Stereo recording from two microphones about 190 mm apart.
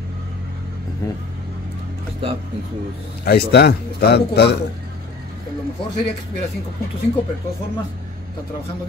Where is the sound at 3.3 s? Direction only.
60° left (ahead or behind).